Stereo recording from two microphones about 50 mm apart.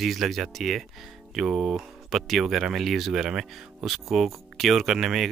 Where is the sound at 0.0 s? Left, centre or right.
Centre.